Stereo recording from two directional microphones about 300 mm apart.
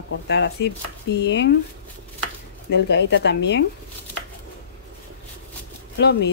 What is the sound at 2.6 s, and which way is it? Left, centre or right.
Speech, left.